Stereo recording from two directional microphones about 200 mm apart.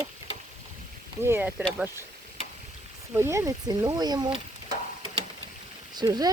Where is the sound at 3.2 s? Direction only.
15° right (ahead or behind).